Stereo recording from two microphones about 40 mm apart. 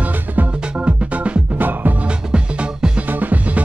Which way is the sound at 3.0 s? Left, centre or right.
Right.